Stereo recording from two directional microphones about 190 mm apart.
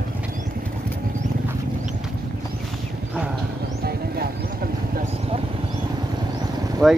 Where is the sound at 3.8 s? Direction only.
55° right (ahead or behind).